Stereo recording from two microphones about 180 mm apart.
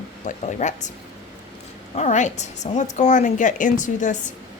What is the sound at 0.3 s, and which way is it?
Speech, 40° left (ahead or behind).